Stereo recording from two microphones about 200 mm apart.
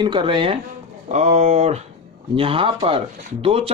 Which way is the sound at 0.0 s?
25° right (ahead or behind).